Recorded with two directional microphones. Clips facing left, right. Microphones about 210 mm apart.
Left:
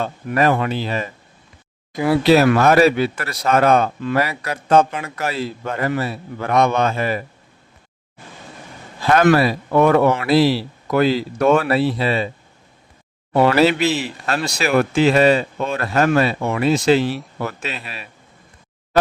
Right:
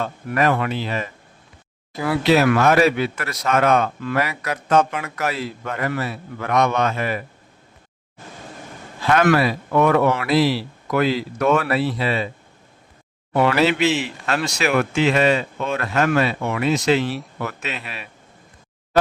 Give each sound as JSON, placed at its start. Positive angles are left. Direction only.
{"t": 0.0, "sound": "speech", "side_deg": 30}
{"t": 2.2, "sound": "speech", "side_deg": 35}
{"t": 9.0, "sound": "a sound", "side_deg": 35}
{"t": 9.2, "sound": "speech", "side_deg": 35}
{"t": 13.3, "sound": "speech", "side_deg": 30}